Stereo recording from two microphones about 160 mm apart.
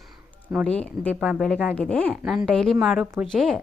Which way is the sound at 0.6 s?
10° left (ahead or behind).